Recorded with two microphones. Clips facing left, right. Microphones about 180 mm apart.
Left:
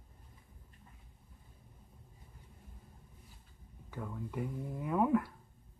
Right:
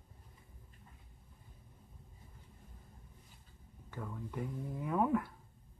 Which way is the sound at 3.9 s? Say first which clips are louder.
Left 2 dB; 5° left (ahead or behind).